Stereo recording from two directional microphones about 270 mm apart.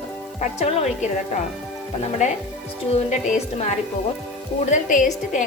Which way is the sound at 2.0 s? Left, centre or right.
Left.